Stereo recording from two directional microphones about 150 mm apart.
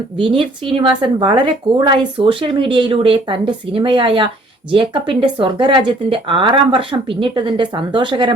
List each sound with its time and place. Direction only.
0.2 s speech: 35° right (ahead or behind)